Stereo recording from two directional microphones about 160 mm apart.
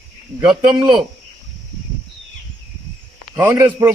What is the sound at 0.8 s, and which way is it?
Speech, 30° right (ahead or behind).